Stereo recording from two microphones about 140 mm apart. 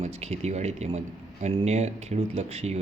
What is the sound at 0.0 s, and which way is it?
A man's voice, 50° right (ahead or behind).